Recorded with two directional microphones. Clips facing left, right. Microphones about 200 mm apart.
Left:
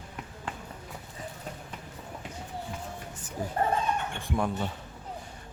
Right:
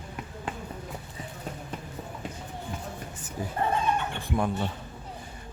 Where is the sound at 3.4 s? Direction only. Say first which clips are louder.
Even; 5° right (ahead or behind).